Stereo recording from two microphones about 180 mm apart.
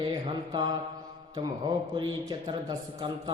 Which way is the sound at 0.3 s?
25° right (ahead or behind).